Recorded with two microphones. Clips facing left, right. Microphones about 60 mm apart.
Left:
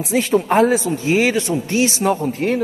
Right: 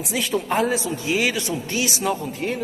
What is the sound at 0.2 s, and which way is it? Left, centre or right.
A man's voice, left.